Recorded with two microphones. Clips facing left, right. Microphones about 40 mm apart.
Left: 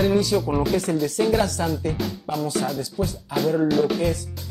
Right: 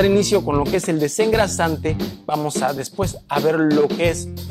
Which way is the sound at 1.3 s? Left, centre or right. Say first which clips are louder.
Right 4 dB; right.